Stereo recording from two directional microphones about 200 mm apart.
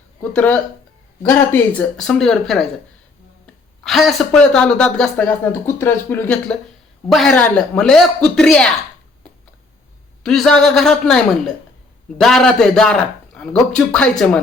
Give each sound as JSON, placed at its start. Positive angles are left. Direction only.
{"t": 0.2, "sound": "speech", "side_deg": 5}
{"t": 10.2, "sound": "speech", "side_deg": 0}